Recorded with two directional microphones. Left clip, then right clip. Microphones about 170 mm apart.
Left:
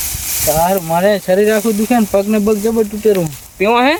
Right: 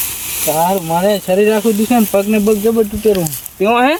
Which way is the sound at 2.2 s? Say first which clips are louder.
Right 1 dB; 20° left (ahead or behind).